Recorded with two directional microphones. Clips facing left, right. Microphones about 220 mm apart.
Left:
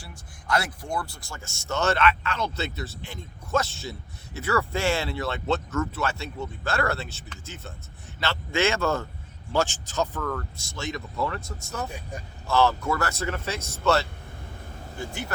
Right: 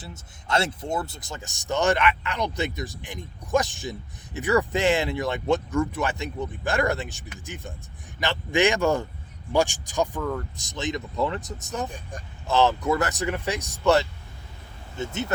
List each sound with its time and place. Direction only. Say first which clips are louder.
0.0 s speech: right 2 dB; 25° right (ahead or behind)
11.9 s speech: left 1 dB; 10° left (ahead or behind)
12.5 s speech: right 2 dB; 20° right (ahead or behind)